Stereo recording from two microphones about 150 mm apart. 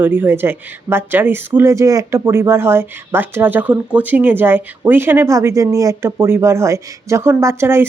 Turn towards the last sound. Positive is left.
turn(degrees=-15)  # may be behind; listen again after turning